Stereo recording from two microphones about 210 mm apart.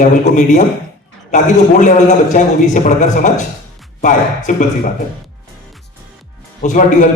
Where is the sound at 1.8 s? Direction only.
35° left (ahead or behind).